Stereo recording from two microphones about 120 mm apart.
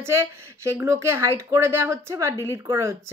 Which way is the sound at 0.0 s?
20° right (ahead or behind).